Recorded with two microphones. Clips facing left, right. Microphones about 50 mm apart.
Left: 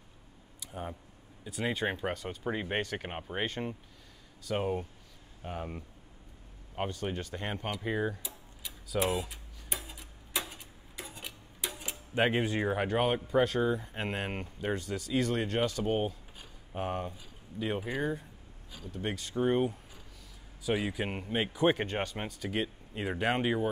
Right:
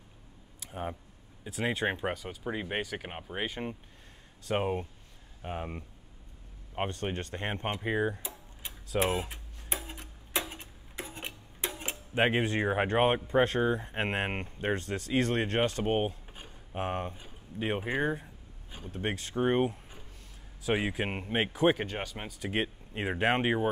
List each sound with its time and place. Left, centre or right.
0.7 s speech: right
1.5 s speech: centre
2.2 s speech: centre
3.4 s speech: centre
4.5 s speech: right
8.2 s tick-tock: right
12.2 s speech: right
21.7 s speech: centre
22.4 s speech: right